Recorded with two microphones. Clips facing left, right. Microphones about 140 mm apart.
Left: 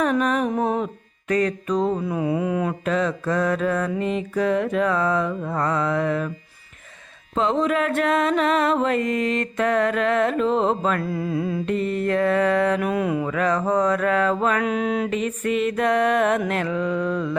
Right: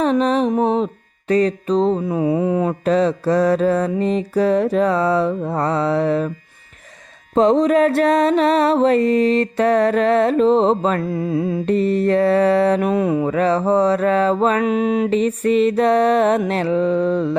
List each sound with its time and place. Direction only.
0.0 s music: 30° right (ahead or behind)
1.3 s mantra: 30° right (ahead or behind)
7.3 s mantra: 40° right (ahead or behind); by 15.1 s 20° right (ahead or behind)
15.1 s mantra: 35° right (ahead or behind)